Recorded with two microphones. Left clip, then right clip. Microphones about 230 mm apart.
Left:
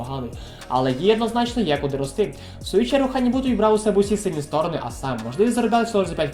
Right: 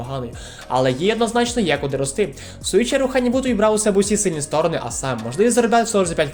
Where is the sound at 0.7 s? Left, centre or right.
Right.